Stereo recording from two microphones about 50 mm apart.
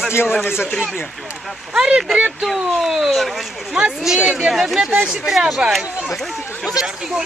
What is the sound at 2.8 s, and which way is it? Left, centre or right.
Speech, centre.